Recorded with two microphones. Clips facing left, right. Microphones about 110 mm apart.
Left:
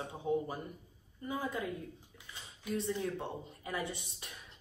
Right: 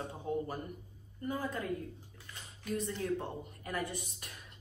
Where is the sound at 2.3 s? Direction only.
25° left (ahead or behind).